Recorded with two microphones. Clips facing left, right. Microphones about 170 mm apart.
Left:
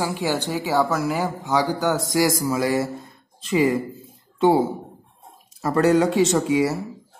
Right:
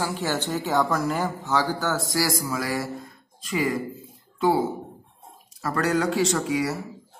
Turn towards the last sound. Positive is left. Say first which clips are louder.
# left 5 dB
turn(degrees=25)  # may be behind; listen again after turning